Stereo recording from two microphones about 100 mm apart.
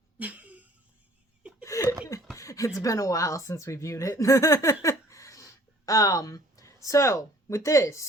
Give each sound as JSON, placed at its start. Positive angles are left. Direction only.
{"t": 0.2, "sound": "a sound", "side_deg": -15}
{"t": 1.6, "sound": "chuckle", "side_deg": 30}
{"t": 2.3, "sound": "speech", "side_deg": 30}